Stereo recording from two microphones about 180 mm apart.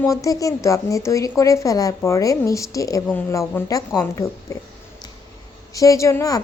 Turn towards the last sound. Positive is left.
turn(degrees=15)  # may be behind; listen again after turning